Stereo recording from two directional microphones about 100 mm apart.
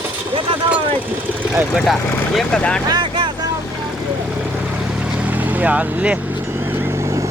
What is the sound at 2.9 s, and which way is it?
Vehicle, 50° right (ahead or behind).